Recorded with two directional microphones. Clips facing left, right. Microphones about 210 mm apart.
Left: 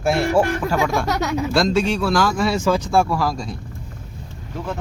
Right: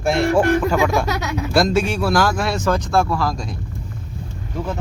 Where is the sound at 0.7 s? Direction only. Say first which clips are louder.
Right 2 dB; 5° right (ahead or behind).